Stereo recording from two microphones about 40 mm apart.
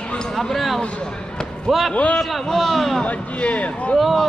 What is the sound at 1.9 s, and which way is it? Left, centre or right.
Speech, left.